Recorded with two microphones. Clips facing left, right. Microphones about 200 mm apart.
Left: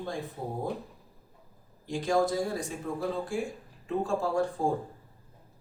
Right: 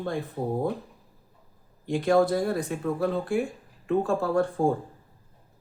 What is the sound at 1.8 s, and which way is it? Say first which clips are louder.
Speech: right 5 dB; 60° right (ahead or behind).